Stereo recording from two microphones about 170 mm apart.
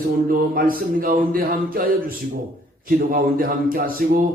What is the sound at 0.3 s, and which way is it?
Speech, 55° right (ahead or behind).